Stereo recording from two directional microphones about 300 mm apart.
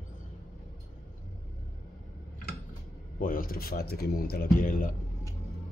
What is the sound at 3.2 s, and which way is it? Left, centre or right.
Speech, left.